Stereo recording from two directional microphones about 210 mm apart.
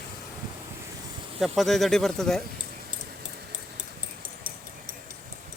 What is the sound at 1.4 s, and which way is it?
Speech, centre (ahead or behind).